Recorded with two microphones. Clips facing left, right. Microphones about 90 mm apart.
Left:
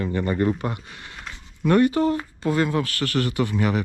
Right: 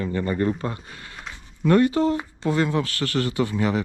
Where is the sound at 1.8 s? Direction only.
25° right (ahead or behind).